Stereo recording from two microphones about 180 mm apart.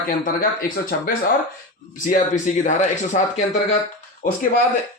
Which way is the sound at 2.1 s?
45° left (ahead or behind).